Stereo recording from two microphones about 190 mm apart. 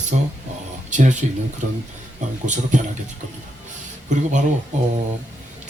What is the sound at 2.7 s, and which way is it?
Speech, 40° right (ahead or behind).